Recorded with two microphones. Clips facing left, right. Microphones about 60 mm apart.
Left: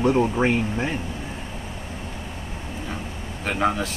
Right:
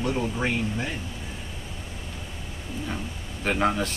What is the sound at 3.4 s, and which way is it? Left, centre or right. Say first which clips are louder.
Speech: left 1 dB; centre.